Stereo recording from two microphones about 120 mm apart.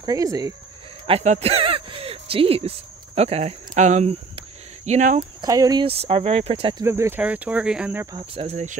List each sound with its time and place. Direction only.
0.0 s speech: 30° right (ahead or behind)
1.0 s a sound: 60° right (ahead or behind)
3.2 s speech: 60° right (ahead or behind)
4.8 s speech: 80° right
5.4 s speech: 30° right (ahead or behind)
5.9 s speech: 55° right (ahead or behind)
6.8 s speech: 20° right (ahead or behind)
7.2 s speech: 10° right (ahead or behind)
7.9 s speech: 20° right (ahead or behind)
8.5 s speech: 70° right (ahead or behind)